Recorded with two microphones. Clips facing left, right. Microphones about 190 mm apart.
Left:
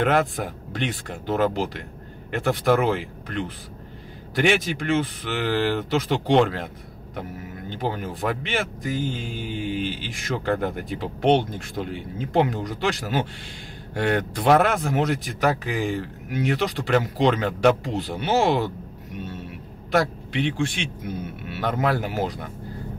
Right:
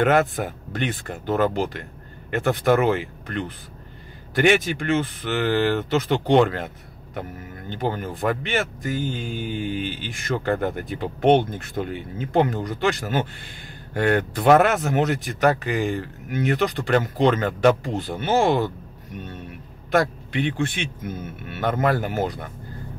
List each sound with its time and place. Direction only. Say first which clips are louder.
0.0 s speech: right 2 dB; 5° right (ahead or behind)
7.7 s speech: right 2 dB; centre (ahead or behind)
9.3 s a man's voice: right 3 dB; 50° right (ahead or behind)
9.6 s speech: even; centre (ahead or behind)
18.4 s a man's voice: right 2 dB; 50° right (ahead or behind)
20.3 s a man's voice: even; 55° right (ahead or behind)
21.5 s speech: right 2 dB; centre (ahead or behind)